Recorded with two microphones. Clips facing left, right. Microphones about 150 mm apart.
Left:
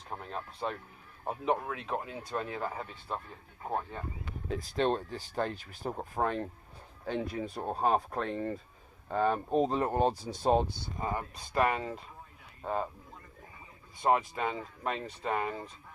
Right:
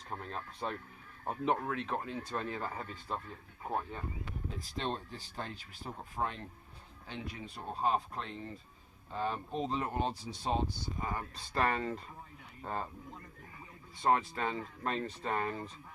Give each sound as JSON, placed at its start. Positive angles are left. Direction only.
{"t": 0.1, "sound": "speech", "side_deg": 5}
{"t": 4.4, "sound": "speech", "side_deg": 55}
{"t": 11.0, "sound": "speech", "side_deg": 20}
{"t": 14.0, "sound": "speech", "side_deg": 15}